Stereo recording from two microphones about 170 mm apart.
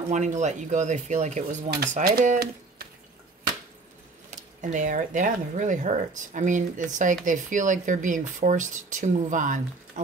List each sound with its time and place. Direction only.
0.1 s speech: 45° right (ahead or behind)
1.7 s speech: 65° right (ahead or behind)
2.3 s a sound: 65° right (ahead or behind)
4.3 s speech: 45° right (ahead or behind)